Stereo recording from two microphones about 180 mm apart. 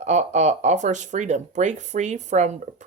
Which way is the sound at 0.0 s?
40° right (ahead or behind).